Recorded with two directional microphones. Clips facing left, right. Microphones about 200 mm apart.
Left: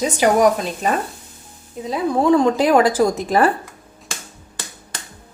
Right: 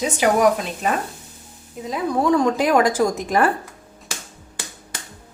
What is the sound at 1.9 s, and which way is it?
A woman's voice, 30° left (ahead or behind).